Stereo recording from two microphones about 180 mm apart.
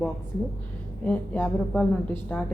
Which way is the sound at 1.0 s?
10° left (ahead or behind).